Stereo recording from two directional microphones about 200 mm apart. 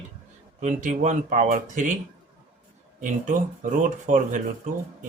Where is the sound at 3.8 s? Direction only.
40° right (ahead or behind).